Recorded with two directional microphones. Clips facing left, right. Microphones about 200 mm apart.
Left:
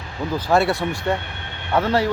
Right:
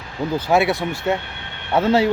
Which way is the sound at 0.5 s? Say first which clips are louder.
Even; centre (ahead or behind).